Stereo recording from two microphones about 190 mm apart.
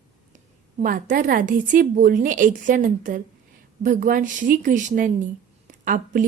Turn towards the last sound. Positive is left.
turn(degrees=-45)  # may be behind; listen again after turning